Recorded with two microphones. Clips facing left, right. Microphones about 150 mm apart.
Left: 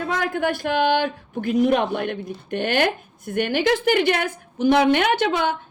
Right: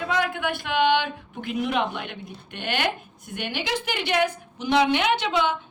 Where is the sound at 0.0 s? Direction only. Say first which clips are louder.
Left 3 dB; 45° left (ahead or behind).